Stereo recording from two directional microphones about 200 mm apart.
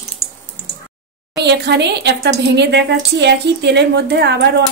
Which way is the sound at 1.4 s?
60° right (ahead or behind).